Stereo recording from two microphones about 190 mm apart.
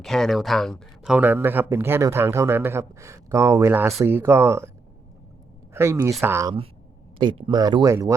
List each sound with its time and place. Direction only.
0.0 s speech: centre (ahead or behind)
5.7 s speech: 15° right (ahead or behind)
7.2 s speech: 25° right (ahead or behind)